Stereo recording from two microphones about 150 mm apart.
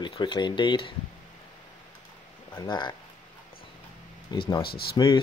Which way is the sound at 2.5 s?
30° left (ahead or behind).